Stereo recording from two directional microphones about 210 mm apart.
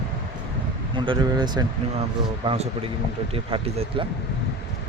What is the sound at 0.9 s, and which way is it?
Speech, 25° right (ahead or behind).